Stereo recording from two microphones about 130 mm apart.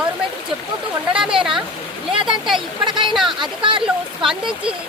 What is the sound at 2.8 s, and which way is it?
Speech, 35° right (ahead or behind).